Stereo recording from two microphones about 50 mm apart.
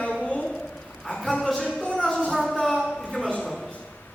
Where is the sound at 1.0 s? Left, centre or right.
Centre.